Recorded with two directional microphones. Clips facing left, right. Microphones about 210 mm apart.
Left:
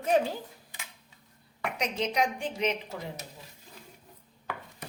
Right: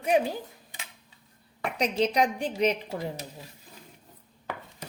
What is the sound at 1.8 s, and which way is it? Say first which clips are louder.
Speech: right 5 dB; 35° right (ahead or behind).